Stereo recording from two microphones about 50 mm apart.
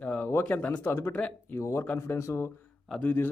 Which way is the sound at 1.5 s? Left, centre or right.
Left.